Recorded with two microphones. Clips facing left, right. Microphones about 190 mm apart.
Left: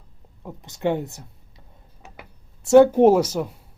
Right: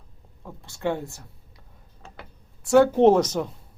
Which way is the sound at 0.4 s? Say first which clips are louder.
Left 3 dB; 20° left (ahead or behind).